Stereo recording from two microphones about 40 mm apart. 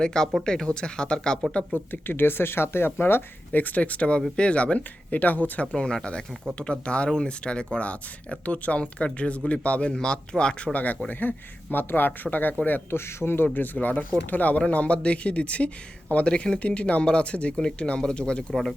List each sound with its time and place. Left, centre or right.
0.0 s speech: centre
1.9 s speech: left
3.5 s speech: left
5.2 s speech: left
5.7 s speech: left
9.9 s speech: left
10.7 s speech: left
12.9 s speech: left
13.7 s speech: left
14.7 s speech: left